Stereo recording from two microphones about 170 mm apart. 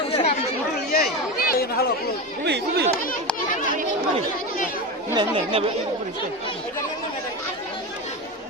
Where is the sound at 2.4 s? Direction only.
85° right.